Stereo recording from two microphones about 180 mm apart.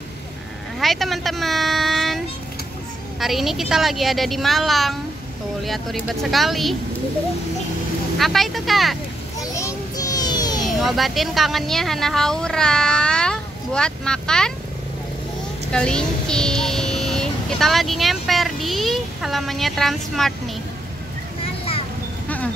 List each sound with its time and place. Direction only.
0.7 s speech: centre (ahead or behind)
8.2 s speech: centre (ahead or behind)
9.4 s a sound: 15° left (ahead or behind)
10.6 s speech: centre (ahead or behind)
15.7 s speech: 5° left (ahead or behind)